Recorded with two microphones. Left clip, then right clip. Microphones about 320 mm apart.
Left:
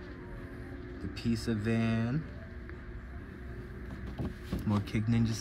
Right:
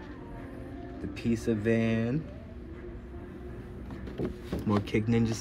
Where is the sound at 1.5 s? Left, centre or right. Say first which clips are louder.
Right 8 dB; right.